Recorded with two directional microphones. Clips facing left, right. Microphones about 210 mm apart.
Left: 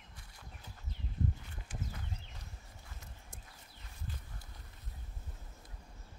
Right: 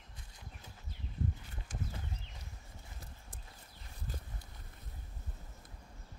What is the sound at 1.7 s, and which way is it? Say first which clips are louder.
Horse: right 1 dB; 40° right (ahead or behind).